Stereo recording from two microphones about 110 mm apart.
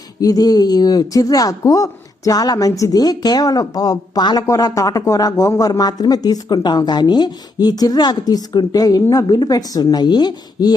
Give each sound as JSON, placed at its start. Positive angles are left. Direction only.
{"t": 0.2, "sound": "speech", "side_deg": 35}